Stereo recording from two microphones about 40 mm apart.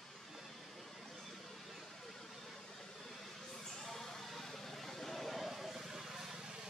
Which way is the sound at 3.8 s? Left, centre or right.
Centre.